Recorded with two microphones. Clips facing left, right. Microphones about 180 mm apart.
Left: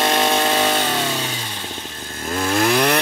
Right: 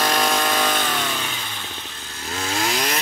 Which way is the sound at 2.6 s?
55° left (ahead or behind).